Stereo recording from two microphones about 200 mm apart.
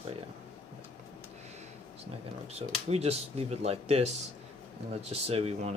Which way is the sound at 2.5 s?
30° right (ahead or behind).